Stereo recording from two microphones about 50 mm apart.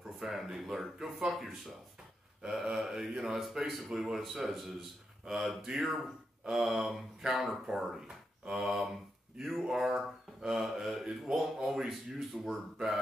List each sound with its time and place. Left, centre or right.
0.2 s speech: centre
2.4 s speech: centre